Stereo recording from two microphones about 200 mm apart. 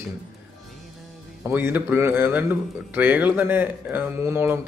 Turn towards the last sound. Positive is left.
turn(degrees=-10)  # may be behind; listen again after turning